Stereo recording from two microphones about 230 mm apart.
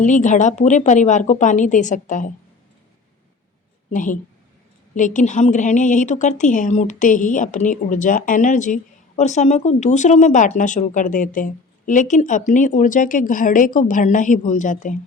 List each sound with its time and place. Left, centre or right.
0.0 s a woman's voice: left
3.9 s a woman's voice: left